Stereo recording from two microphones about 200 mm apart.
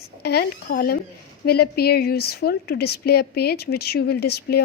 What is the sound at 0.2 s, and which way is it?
A woman's voice, 50° left (ahead or behind).